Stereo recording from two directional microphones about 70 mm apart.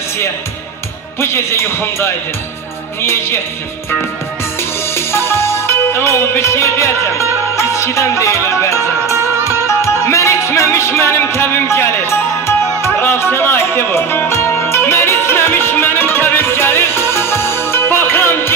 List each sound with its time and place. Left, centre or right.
1.2 s a man's voice: left
4.9 s music: left